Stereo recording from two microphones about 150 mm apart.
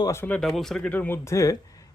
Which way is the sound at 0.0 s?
15° left (ahead or behind).